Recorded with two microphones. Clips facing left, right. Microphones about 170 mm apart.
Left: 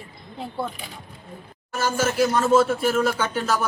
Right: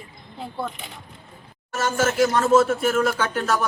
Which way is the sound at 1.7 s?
Centre (ahead or behind).